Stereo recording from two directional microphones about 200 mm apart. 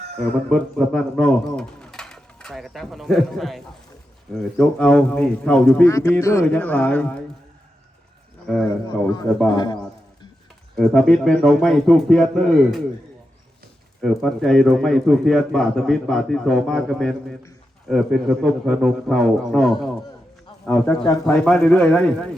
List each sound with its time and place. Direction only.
0.2 s a man's voice: centre (ahead or behind)
8.5 s a man's voice: centre (ahead or behind)
9.5 s a man's voice: 20° left (ahead or behind)
10.8 s a man's voice: centre (ahead or behind)
14.0 s a man's voice: centre (ahead or behind)